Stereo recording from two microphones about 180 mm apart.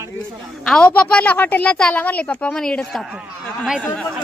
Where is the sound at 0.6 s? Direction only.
5° left (ahead or behind).